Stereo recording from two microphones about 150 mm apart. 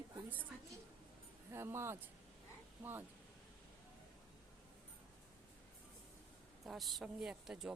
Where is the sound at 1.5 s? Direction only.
15° right (ahead or behind).